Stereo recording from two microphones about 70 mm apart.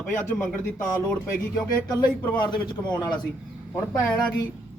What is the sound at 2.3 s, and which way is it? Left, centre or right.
Speech, left.